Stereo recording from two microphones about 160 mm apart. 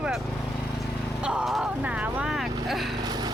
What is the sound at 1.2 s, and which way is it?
Speech, 5° right (ahead or behind).